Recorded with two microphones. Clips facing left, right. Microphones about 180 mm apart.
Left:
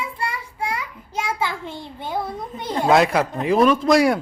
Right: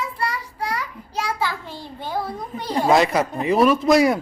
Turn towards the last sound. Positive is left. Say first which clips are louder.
# even
turn(degrees=0)  # may be behind; listen again after turning